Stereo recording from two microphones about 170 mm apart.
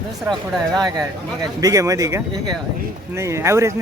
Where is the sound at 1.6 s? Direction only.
20° right (ahead or behind).